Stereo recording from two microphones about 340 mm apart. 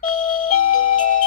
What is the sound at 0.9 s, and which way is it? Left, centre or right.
Music, left.